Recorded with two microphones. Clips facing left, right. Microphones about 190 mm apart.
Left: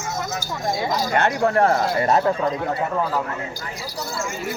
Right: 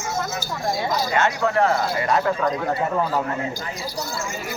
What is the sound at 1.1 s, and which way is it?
Speech, 50° left (ahead or behind).